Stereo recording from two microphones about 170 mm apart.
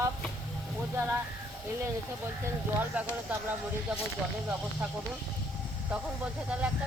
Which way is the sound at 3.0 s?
10° right (ahead or behind).